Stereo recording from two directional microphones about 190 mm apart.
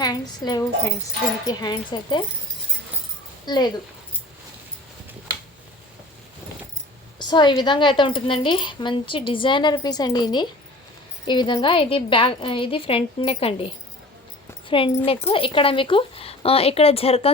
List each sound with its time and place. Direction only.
0.0 s a woman's voice: 20° left (ahead or behind)
3.4 s speech: 20° left (ahead or behind)
7.2 s a woman's voice: 25° left (ahead or behind)
15.0 s speech: 30° left (ahead or behind)